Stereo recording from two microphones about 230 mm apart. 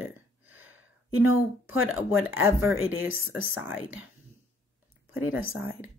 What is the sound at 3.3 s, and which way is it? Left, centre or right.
Speech, left.